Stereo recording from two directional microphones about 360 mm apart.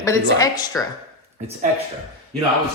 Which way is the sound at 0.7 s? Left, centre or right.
Centre.